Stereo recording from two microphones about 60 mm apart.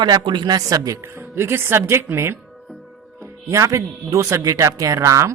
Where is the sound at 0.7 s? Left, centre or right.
Right.